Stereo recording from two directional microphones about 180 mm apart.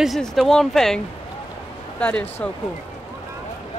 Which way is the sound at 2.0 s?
10° left (ahead or behind).